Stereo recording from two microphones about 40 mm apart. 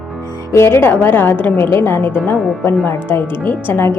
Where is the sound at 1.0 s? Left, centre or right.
Left.